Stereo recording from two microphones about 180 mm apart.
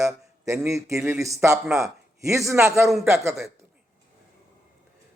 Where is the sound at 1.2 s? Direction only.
15° right (ahead or behind).